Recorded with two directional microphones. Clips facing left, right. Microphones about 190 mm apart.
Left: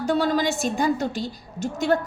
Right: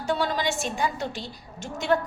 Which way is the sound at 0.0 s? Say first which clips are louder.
Left 5 dB; 40° left (ahead or behind).